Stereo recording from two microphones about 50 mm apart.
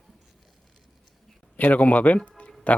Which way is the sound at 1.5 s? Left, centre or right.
Left.